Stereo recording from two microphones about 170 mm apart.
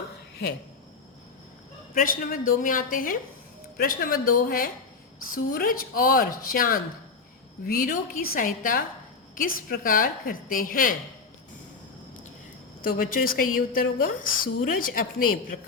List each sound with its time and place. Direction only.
2.0 s a woman's voice: 55° left (ahead or behind)
12.8 s speech: 55° left (ahead or behind)